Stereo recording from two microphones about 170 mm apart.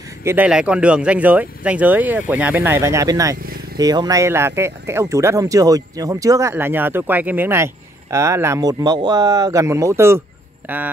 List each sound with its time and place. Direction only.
0.2 s speech: 15° right (ahead or behind)